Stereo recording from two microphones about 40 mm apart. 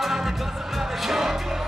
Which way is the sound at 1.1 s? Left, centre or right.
Centre.